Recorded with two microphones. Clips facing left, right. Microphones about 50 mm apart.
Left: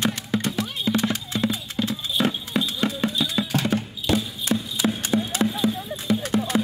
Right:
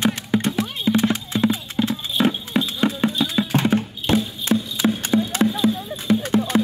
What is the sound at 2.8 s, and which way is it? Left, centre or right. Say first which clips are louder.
Music: right 4 dB; right.